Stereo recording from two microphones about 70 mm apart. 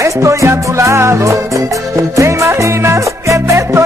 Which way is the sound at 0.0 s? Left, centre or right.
Right.